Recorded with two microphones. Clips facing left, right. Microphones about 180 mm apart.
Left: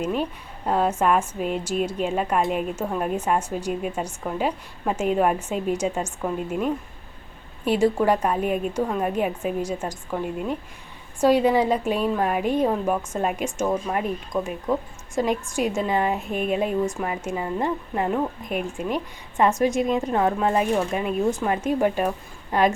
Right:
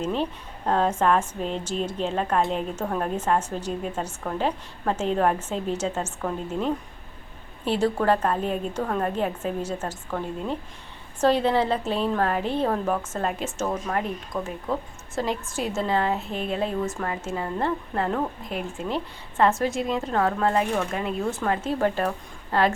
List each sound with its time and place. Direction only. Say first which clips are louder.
0.0 s a woman's voice: left 1 dB; 10° left (ahead or behind)